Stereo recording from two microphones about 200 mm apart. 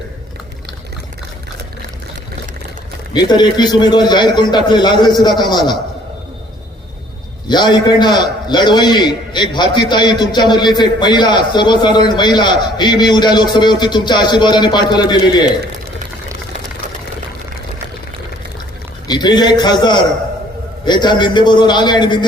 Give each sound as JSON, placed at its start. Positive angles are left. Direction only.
{"t": 3.1, "sound": "a man's voice", "side_deg": 20}
{"t": 7.4, "sound": "a man's voice", "side_deg": 20}
{"t": 19.0, "sound": "a man's voice", "side_deg": 20}